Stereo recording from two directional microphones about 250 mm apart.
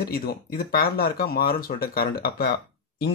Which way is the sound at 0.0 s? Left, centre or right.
Left.